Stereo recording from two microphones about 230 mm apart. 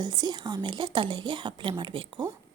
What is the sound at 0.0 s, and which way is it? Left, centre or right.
A woman's voice, centre.